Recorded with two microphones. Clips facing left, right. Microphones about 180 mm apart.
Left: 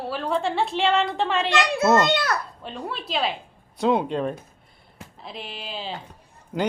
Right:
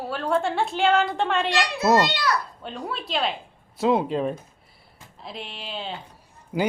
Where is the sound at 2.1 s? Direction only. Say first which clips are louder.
Left 2 dB; 50° left (ahead or behind).